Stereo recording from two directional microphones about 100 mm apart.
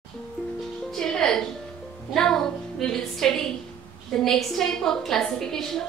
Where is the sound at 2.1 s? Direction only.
5° left (ahead or behind).